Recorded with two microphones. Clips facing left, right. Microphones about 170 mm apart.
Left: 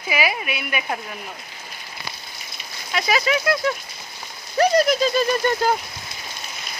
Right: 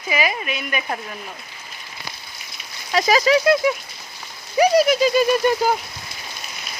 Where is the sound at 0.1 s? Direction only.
10° left (ahead or behind).